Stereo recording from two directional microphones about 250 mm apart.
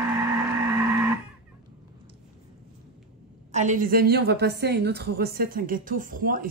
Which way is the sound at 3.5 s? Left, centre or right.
Right.